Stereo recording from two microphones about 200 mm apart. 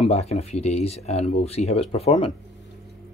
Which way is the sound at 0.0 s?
30° left (ahead or behind).